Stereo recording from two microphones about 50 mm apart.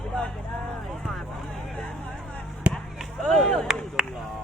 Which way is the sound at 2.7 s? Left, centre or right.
Right.